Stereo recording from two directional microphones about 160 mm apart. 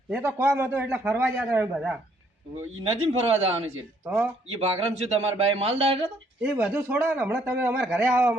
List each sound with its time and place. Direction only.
0.1 s a man's voice: 15° right (ahead or behind)
2.8 s speech: 35° right (ahead or behind)
4.0 s a man's voice: 5° right (ahead or behind)
4.6 s speech: 40° right (ahead or behind)
6.4 s a man's voice: 5° right (ahead or behind)